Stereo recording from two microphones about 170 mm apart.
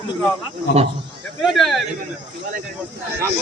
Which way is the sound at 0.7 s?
90° left.